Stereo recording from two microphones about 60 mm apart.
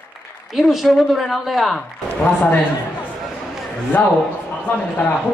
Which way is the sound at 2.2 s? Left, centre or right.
Left.